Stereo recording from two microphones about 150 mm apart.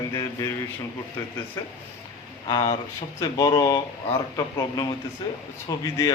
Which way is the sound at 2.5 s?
30° left (ahead or behind).